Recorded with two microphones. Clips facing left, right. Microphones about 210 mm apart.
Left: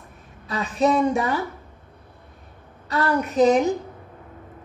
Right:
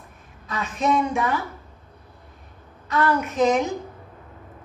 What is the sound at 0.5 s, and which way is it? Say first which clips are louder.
Speech: left 3 dB; 35° left (ahead or behind).